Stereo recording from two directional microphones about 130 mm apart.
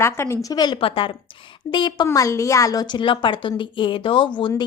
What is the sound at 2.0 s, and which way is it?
A woman's voice, 25° left (ahead or behind).